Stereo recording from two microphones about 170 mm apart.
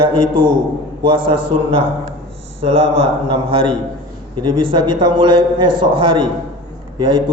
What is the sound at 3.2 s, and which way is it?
A man's voice, 30° right (ahead or behind).